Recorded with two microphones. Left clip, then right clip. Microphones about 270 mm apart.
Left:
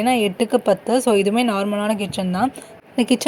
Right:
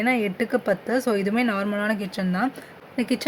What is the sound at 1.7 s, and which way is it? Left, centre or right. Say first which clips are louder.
Speech: left 4 dB; centre.